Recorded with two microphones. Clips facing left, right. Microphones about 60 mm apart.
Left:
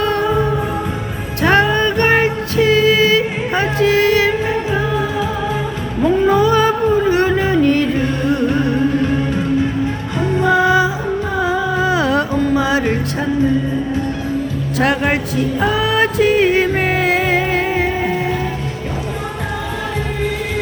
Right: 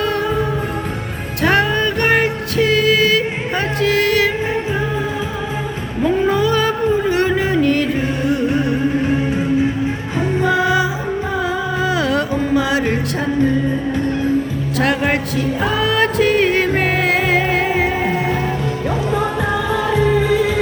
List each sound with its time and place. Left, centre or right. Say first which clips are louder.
0.0 s music: left 2 dB; centre
6.0 s music: left 3 dB; centre
10.5 s music: left 5 dB; centre
14.8 s music: left 1 dB; centre